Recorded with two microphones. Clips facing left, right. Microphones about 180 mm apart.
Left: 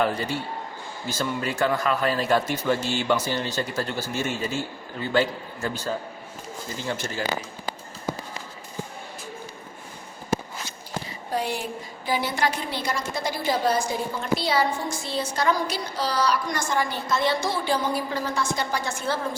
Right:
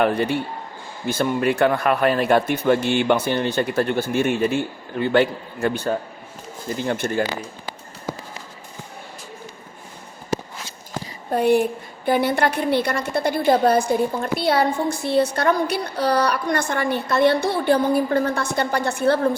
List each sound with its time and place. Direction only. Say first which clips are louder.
0.0 s a woman's voice: right 5 dB; 60° right (ahead or behind)
11.3 s a woman's voice: right 11 dB; 55° right (ahead or behind)